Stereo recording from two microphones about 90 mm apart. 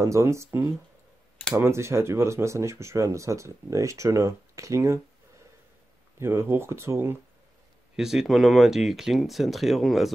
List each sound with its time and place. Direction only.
0.0 s speech: 35° right (ahead or behind)
6.1 s speech: 30° right (ahead or behind)
7.9 s speech: 5° right (ahead or behind)